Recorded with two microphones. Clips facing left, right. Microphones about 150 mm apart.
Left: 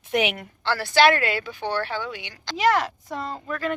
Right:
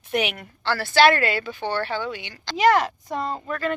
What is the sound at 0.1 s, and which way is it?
A woman's voice, 20° left (ahead or behind).